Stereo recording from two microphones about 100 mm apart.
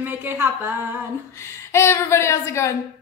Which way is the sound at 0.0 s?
20° right (ahead or behind).